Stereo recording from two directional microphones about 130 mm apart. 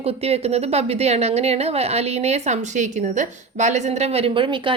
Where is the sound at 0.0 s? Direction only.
50° right (ahead or behind).